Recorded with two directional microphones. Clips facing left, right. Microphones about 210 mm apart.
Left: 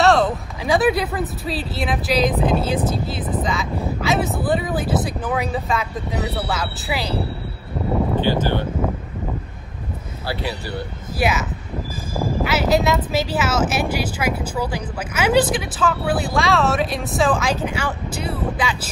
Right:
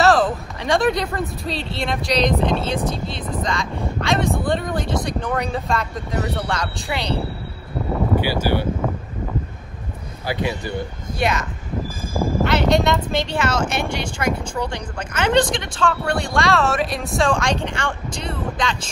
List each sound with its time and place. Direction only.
0.0 s speech: centre (ahead or behind)
8.2 s speech: 10° right (ahead or behind)
10.2 s speech: 20° right (ahead or behind)
11.1 s speech: 5° left (ahead or behind)
12.4 s speech: 5° left (ahead or behind)